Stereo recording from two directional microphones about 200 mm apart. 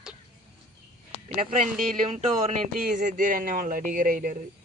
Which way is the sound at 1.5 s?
40° right (ahead or behind).